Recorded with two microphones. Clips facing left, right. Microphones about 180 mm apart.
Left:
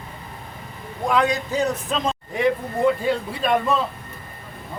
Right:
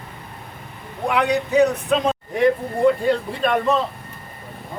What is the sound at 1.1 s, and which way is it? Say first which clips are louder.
Speech: right 4 dB; 65° right (ahead or behind).